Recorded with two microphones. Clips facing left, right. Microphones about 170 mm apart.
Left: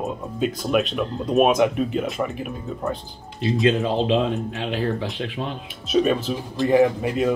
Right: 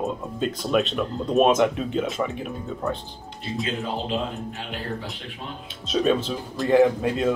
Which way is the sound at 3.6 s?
90° left.